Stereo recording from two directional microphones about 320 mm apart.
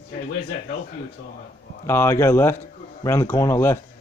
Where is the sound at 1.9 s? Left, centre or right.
Centre.